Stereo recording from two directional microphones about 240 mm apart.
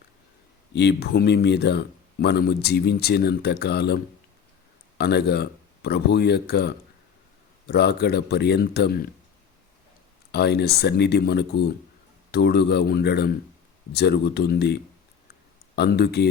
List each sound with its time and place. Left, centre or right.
0.7 s speech: left
10.3 s speech: left